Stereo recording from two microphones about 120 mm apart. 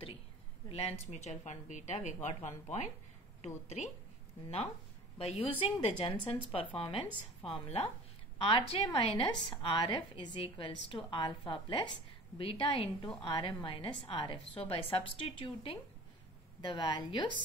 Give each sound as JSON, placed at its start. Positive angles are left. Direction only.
{"t": 0.7, "sound": "speech", "side_deg": 55}
{"t": 1.1, "sound": "speech", "side_deg": 70}
{"t": 2.2, "sound": "speech", "side_deg": 70}
{"t": 5.2, "sound": "a woman's voice", "side_deg": 60}